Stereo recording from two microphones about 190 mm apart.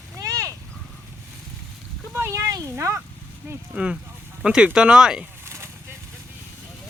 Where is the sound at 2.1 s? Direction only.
15° right (ahead or behind).